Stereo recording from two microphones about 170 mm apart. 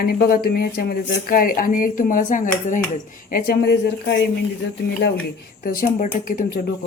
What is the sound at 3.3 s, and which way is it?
Speech, 75° left (ahead or behind).